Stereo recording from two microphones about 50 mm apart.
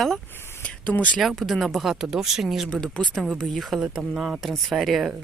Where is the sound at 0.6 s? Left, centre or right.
Left.